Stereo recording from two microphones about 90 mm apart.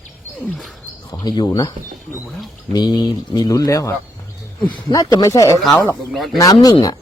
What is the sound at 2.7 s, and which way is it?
Speech, 50° left (ahead or behind).